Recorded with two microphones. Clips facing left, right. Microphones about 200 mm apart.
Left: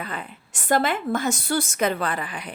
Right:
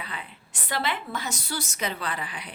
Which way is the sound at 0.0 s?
45° left (ahead or behind).